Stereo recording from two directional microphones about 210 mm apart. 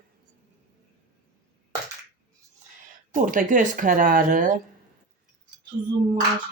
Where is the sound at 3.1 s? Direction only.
40° right (ahead or behind).